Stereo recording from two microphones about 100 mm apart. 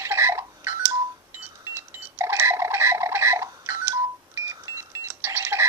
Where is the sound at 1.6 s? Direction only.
25° right (ahead or behind).